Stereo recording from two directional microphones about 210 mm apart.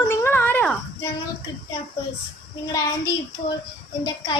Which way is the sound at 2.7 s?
15° left (ahead or behind).